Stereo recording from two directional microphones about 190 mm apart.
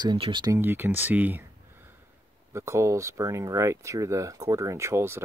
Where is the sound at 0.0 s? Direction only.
25° right (ahead or behind).